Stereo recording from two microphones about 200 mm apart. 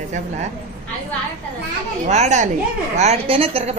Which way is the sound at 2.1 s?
35° right (ahead or behind).